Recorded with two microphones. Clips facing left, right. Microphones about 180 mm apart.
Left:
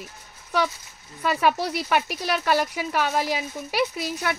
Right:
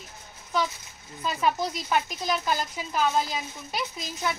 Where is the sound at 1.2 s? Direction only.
70° left (ahead or behind).